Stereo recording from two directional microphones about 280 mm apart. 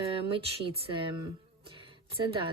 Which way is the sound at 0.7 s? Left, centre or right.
Centre.